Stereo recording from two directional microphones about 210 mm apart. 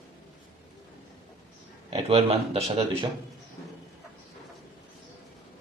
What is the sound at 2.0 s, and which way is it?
A man's voice, 30° right (ahead or behind).